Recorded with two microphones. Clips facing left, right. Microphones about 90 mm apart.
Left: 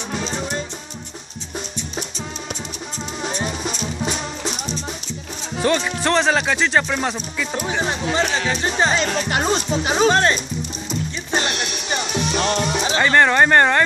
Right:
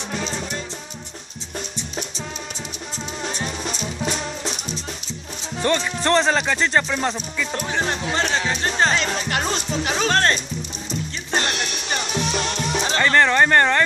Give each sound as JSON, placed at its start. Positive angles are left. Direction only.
{"t": 0.3, "sound": "music", "side_deg": 30}
{"t": 3.4, "sound": "music", "side_deg": 10}
{"t": 5.6, "sound": "speech", "side_deg": 10}
{"t": 9.3, "sound": "music", "side_deg": 20}